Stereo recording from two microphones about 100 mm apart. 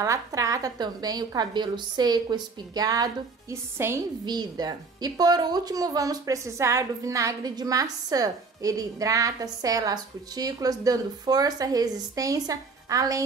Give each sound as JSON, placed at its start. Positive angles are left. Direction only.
{"t": 0.0, "sound": "a woman's voice", "side_deg": -35}
{"t": 3.7, "sound": "a woman's voice", "side_deg": -25}
{"t": 4.3, "sound": "a woman's voice", "side_deg": -45}